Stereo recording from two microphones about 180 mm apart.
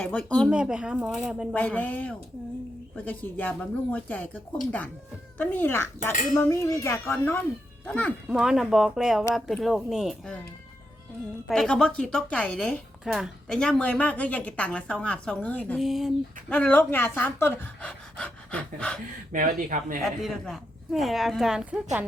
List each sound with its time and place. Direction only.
0.0 s a woman's voice: 5° left (ahead or behind)
1.5 s a woman's voice: 10° left (ahead or behind)
11.4 s speech: centre (ahead or behind)
19.3 s speech: 50° right (ahead or behind)
20.0 s a woman's voice: centre (ahead or behind)